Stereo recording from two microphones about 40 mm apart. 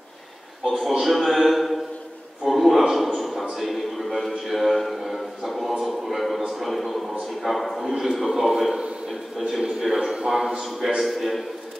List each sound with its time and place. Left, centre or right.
0.7 s a man's voice: centre
2.4 s a sound: centre
7.4 s a man's voice: centre
11.0 s a man's voice: centre